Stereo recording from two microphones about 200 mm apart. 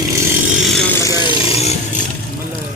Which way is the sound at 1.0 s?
20° left (ahead or behind).